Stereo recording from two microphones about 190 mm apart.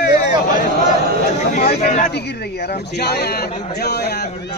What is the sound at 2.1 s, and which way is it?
A man's voice, 60° left (ahead or behind).